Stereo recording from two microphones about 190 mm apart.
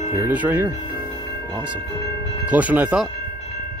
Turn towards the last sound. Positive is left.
turn(degrees=-5)  # may be behind; listen again after turning